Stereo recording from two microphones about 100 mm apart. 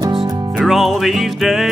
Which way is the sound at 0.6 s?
Centre (ahead or behind).